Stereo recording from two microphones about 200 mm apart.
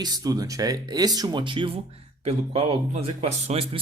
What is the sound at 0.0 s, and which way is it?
Speech, 20° right (ahead or behind).